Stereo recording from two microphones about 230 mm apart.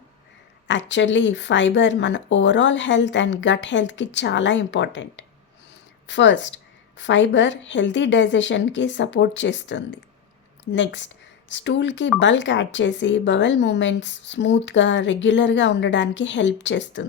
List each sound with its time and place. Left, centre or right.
0.7 s speech: left